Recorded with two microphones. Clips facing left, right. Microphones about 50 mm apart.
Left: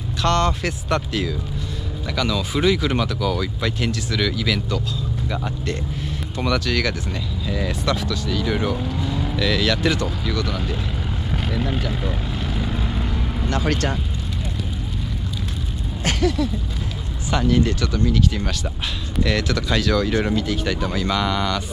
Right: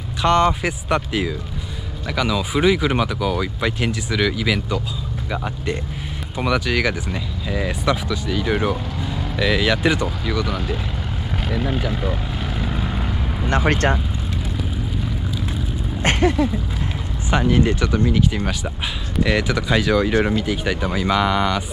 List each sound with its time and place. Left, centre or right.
0.2 s speech: centre
11.4 s vehicle: centre
13.5 s speech: right
16.0 s a sound: right
17.3 s speech: right